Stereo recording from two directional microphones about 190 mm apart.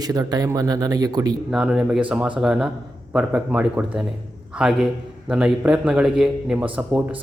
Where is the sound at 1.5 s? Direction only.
5° right (ahead or behind).